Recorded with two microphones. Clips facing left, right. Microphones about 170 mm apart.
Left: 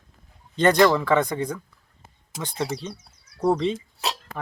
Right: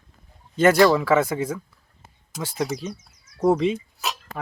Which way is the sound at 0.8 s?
5° right (ahead or behind).